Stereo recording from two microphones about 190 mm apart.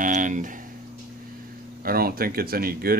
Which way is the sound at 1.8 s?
50° right (ahead or behind).